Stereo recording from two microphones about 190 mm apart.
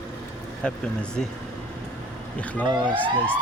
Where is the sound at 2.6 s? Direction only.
25° right (ahead or behind).